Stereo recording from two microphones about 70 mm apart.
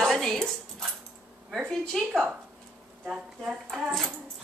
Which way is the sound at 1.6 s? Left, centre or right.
Centre.